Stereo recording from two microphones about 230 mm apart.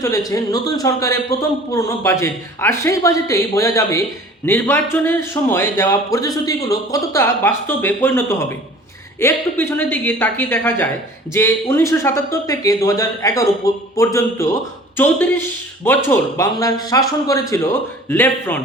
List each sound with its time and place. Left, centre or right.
0.3 s speech: centre